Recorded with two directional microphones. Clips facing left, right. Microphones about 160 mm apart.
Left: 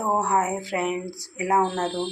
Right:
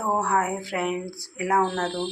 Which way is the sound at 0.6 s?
Centre (ahead or behind).